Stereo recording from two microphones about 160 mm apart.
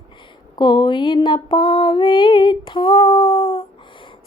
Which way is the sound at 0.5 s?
30° left (ahead or behind).